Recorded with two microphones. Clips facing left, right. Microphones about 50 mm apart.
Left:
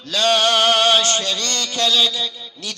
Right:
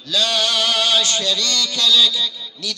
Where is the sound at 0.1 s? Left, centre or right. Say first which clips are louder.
Left 3 dB; left.